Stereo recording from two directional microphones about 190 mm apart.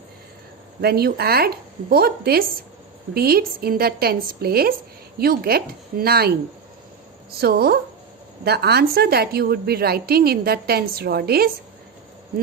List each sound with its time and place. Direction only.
0.8 s a woman's voice: 55° right (ahead or behind)
7.4 s a woman's voice: 55° right (ahead or behind)